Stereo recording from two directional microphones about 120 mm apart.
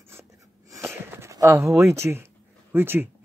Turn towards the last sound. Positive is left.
turn(degrees=-20)  # may be behind; listen again after turning